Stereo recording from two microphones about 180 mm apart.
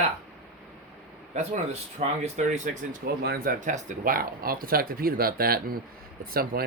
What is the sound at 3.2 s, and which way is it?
Speech, 55° right (ahead or behind).